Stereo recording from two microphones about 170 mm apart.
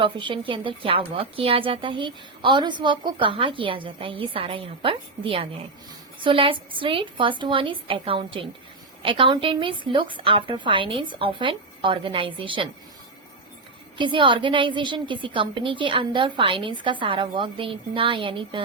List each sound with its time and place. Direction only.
0.0 s a woman's voice: 30° right (ahead or behind)
14.0 s a woman's voice: 30° right (ahead or behind)